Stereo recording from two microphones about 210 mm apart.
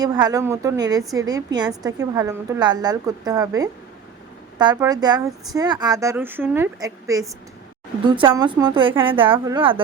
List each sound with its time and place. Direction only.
0.0 s a woman's voice: 20° right (ahead or behind)
9.3 s a woman's voice: 15° right (ahead or behind)